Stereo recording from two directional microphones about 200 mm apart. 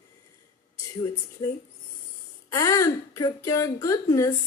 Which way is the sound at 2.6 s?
15° left (ahead or behind).